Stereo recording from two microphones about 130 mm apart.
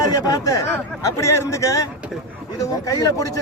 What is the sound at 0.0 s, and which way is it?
Speech, 30° left (ahead or behind).